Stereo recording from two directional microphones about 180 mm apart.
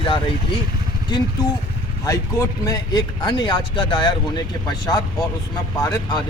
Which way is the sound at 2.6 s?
20° left (ahead or behind).